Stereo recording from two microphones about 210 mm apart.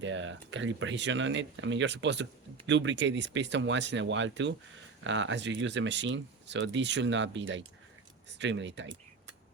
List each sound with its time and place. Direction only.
0.0 s speech: 60° right (ahead or behind)